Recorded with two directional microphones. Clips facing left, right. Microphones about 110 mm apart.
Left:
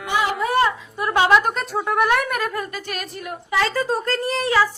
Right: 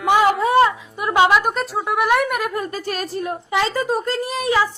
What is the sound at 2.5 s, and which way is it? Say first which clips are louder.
A woman's voice: right 3 dB; 30° right (ahead or behind).